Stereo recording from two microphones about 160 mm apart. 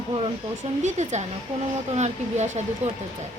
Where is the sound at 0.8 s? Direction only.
45° right (ahead or behind).